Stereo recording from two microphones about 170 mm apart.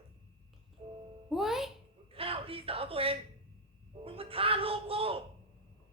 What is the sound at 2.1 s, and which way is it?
A man's voice, 35° right (ahead or behind).